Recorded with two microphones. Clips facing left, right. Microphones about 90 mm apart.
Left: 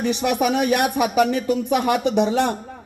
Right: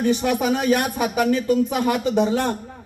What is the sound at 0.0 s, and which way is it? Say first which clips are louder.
A man's voice: even; 85° left.